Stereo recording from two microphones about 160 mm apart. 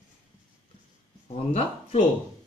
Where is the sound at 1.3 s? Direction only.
40° left (ahead or behind).